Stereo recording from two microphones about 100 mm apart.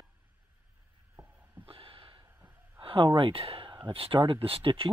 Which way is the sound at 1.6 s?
60° right (ahead or behind).